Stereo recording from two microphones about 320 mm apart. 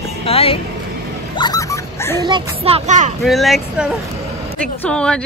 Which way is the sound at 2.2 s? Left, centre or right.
Centre.